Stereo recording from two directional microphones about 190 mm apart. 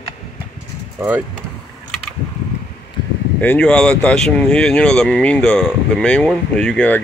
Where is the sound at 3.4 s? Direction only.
10° left (ahead or behind).